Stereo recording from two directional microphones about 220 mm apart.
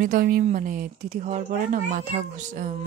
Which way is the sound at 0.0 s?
40° right (ahead or behind).